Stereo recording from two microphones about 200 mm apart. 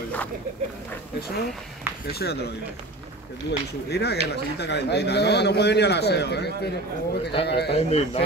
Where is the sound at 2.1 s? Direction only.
55° left (ahead or behind).